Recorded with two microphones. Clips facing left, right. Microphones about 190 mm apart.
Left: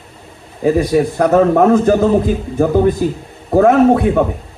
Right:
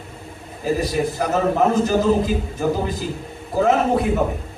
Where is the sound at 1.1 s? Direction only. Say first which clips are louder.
Left 11 dB; 60° left (ahead or behind).